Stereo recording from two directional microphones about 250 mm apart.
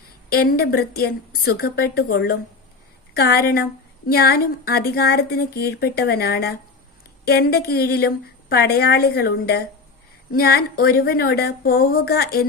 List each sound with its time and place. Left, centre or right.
0.3 s a woman's voice: left